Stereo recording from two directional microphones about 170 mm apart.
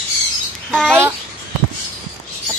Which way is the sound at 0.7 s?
Centre (ahead or behind).